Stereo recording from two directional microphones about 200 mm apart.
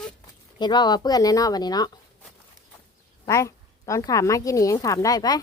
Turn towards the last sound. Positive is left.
turn(degrees=20)  # may be behind; listen again after turning